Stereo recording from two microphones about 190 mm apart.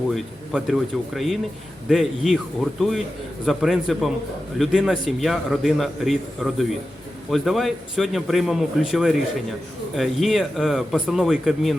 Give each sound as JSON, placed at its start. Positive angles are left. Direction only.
{"t": 0.1, "sound": "a man's voice", "side_deg": 0}
{"t": 3.4, "sound": "a man's voice", "side_deg": 0}